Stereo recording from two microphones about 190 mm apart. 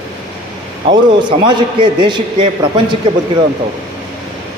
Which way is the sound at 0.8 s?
25° right (ahead or behind).